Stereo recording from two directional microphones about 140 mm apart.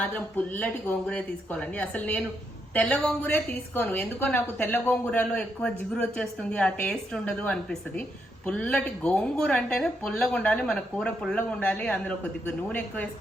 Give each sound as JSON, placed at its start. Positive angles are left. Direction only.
{"t": 0.0, "sound": "a woman's voice", "side_deg": 10}